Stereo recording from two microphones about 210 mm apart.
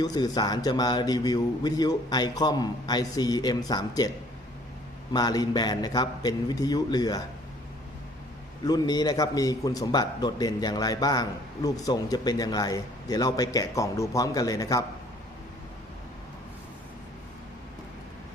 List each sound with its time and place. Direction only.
0.0 s a man's voice: 20° left (ahead or behind)
5.1 s a man's voice: 20° left (ahead or behind)
8.6 s a man's voice: 20° left (ahead or behind)